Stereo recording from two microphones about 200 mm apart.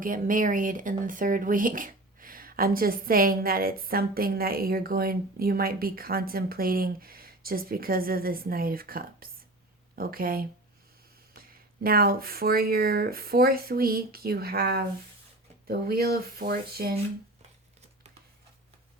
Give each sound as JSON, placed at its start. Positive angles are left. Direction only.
{"t": 0.0, "sound": "speech", "side_deg": -40}
{"t": 11.5, "sound": "speech", "side_deg": -45}